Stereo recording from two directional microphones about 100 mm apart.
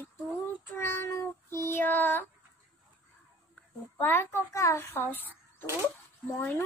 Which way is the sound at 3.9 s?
20° left (ahead or behind).